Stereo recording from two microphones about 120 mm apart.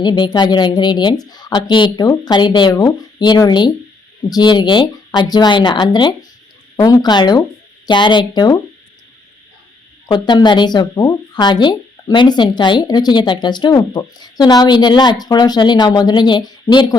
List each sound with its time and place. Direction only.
0.0 s speech: 35° left (ahead or behind)
10.1 s speech: 35° left (ahead or behind)